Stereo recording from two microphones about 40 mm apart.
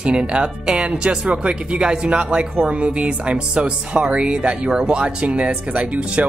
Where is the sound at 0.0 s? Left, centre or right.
Right.